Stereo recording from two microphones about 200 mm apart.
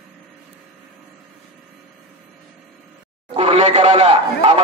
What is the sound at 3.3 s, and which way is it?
Speech, 30° right (ahead or behind).